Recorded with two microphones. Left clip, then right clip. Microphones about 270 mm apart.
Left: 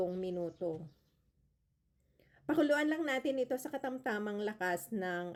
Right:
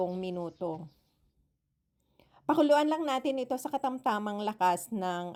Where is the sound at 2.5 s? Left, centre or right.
Right.